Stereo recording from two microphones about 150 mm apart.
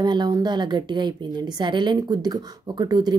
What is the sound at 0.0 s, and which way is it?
A woman's voice, 30° right (ahead or behind).